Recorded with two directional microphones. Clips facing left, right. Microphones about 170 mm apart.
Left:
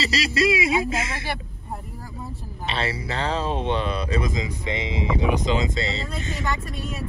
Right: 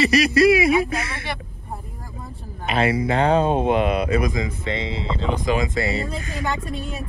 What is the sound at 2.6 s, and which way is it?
Speech, 30° left (ahead or behind).